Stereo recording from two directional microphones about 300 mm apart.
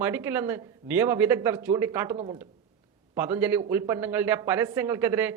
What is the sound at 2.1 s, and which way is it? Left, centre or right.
Speech, centre.